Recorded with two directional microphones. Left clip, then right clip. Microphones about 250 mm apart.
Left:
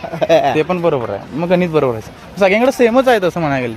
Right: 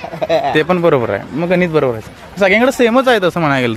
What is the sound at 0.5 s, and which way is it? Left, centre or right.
Speech, centre.